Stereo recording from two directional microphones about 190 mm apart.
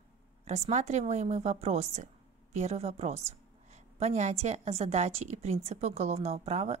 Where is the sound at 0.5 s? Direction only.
35° right (ahead or behind).